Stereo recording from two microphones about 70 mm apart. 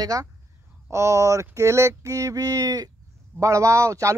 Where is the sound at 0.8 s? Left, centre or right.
Right.